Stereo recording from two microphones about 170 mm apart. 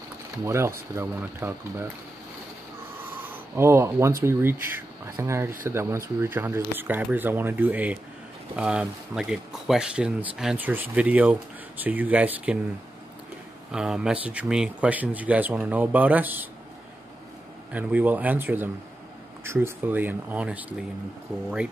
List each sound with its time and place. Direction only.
0.5 s a man's voice: 15° right (ahead or behind)
3.0 s a sound: 10° right (ahead or behind)
4.2 s a man's voice: 15° right (ahead or behind)
13.7 s a man's voice: 5° right (ahead or behind)
17.7 s a man's voice: 10° right (ahead or behind)